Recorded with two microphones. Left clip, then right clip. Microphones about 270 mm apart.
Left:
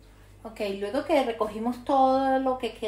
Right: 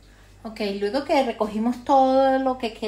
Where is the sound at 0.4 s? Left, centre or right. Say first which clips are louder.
Right 4 dB; right.